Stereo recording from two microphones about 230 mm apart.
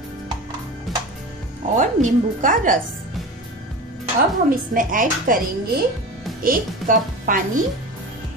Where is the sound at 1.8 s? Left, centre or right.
Right.